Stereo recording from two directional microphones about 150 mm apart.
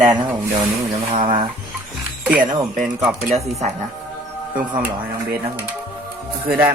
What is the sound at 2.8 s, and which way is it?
Speech, 5° right (ahead or behind).